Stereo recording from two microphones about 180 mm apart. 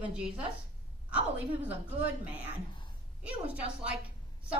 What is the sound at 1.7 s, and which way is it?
A woman's voice, 10° right (ahead or behind).